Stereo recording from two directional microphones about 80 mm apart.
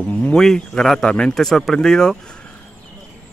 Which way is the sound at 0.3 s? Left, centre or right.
Centre.